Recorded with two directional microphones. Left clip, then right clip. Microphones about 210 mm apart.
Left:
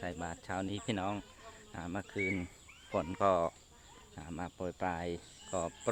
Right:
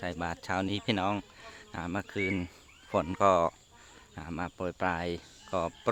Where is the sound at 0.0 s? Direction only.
30° right (ahead or behind).